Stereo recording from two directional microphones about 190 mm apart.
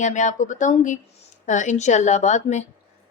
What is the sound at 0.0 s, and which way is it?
Speech, 40° left (ahead or behind).